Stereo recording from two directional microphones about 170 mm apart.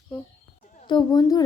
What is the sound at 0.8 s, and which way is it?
Speech, 25° left (ahead or behind).